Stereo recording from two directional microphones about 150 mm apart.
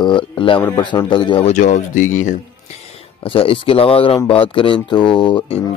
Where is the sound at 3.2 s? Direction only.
35° left (ahead or behind).